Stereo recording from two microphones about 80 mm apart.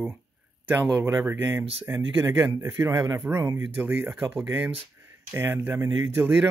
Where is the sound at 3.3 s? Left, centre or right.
Right.